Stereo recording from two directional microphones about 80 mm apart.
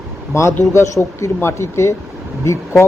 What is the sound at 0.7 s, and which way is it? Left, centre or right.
Speech, left.